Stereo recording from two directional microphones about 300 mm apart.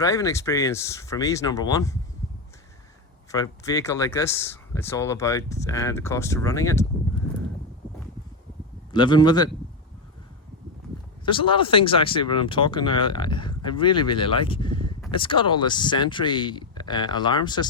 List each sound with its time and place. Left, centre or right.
0.0 s speech: centre
3.3 s speech: centre
8.9 s speech: centre
11.3 s speech: centre